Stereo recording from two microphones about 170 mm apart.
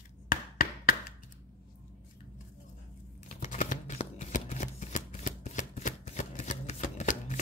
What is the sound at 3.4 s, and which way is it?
Shuffling cards, 45° left (ahead or behind).